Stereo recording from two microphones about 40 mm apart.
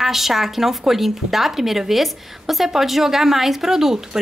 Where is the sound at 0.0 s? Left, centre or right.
Centre.